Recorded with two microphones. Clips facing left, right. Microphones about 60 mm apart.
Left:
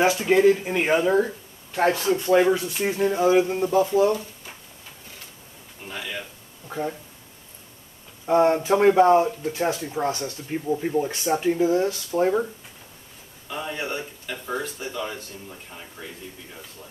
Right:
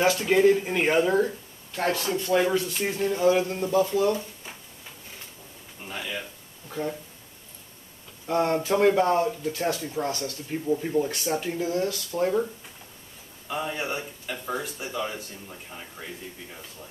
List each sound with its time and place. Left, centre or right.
0.0 s speech: centre
1.7 s speech: left
2.6 s speech: centre
5.9 s a man's voice: centre
8.3 s speech: left
13.7 s speech: centre